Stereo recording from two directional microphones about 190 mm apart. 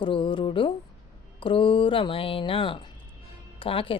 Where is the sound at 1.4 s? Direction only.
25° left (ahead or behind).